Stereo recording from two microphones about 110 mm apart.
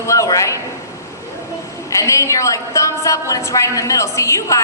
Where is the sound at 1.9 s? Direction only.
30° left (ahead or behind).